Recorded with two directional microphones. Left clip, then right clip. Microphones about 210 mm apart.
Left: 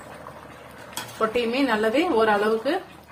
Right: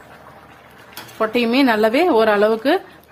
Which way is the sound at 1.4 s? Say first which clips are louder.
Right 9 dB; 55° right (ahead or behind).